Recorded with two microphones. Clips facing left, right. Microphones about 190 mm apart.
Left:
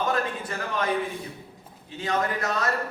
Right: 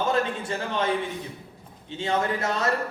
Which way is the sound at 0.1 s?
25° right (ahead or behind).